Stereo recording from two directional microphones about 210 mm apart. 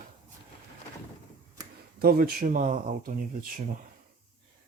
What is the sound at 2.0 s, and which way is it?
Speech, 45° right (ahead or behind).